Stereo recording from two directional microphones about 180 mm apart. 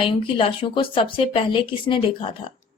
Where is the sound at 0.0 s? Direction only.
30° left (ahead or behind).